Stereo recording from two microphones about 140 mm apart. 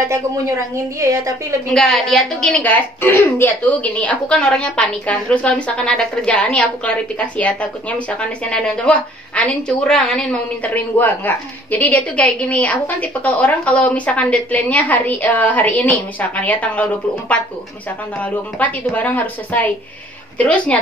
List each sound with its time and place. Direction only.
0.0 s a woman's voice: 20° right (ahead or behind)
1.7 s a woman's voice: 5° left (ahead or behind)